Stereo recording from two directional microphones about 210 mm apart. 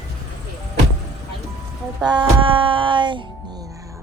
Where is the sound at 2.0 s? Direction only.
20° right (ahead or behind).